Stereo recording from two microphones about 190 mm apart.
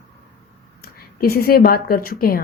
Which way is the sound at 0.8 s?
55° left (ahead or behind).